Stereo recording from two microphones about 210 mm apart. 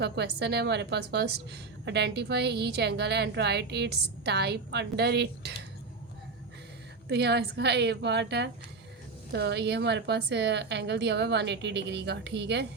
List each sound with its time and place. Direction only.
0.0 s a woman's voice: 55° right (ahead or behind)
7.1 s a woman's voice: 55° right (ahead or behind)